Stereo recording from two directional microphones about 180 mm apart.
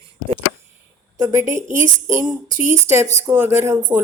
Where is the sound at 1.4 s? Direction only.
45° right (ahead or behind).